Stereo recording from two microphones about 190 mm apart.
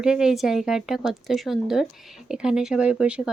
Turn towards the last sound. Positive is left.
turn(degrees=-5)  # may be behind; listen again after turning